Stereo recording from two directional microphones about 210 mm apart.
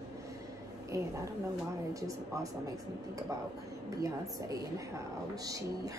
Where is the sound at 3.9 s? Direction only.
15° right (ahead or behind).